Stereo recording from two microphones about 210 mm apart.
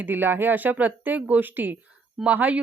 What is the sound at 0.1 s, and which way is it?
Speech, 10° right (ahead or behind).